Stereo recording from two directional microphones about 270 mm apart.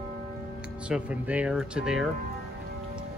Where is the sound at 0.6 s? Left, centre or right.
Centre.